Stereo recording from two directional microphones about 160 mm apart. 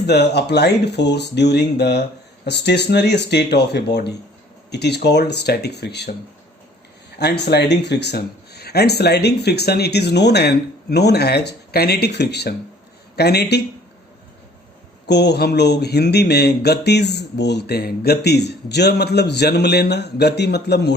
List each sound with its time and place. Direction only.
0.0 s speech: 90° left
7.2 s speech: 90° left
15.0 s speech: 90° left